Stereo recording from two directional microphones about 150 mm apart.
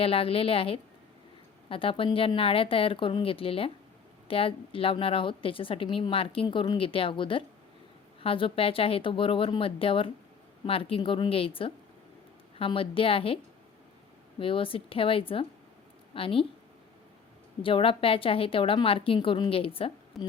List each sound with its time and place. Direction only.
0.0 s a woman's voice: 40° left (ahead or behind)
17.6 s a woman's voice: 35° left (ahead or behind)
20.1 s a woman's voice: centre (ahead or behind)